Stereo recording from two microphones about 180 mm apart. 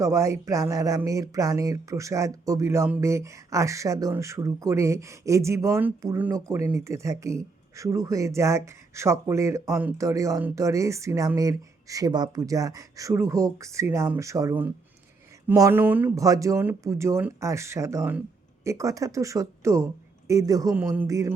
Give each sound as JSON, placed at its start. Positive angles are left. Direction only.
{"t": 0.0, "sound": "speech", "side_deg": -15}